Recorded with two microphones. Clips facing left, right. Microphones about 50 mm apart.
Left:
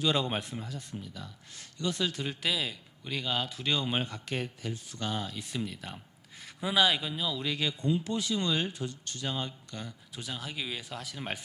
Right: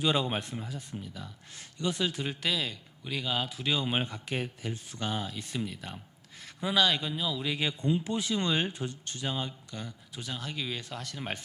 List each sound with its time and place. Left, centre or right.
0.0 s speech: centre
0.3 s a man's voice: centre
2.4 s a man's voice: centre
4.7 s speech: right
5.0 s a man's voice: centre
7.5 s speech: right
9.3 s a man's voice: centre